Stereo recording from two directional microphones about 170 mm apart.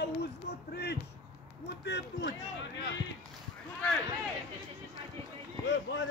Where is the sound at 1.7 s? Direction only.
90° left.